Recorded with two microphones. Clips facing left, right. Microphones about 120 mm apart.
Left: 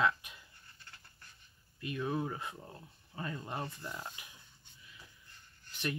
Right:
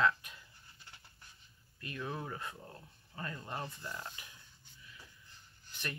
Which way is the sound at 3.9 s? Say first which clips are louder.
Left 1 dB; 25° left (ahead or behind).